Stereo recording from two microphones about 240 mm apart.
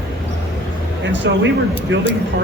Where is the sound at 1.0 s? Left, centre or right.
Right.